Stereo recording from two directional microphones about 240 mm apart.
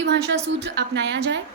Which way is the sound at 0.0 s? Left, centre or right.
Right.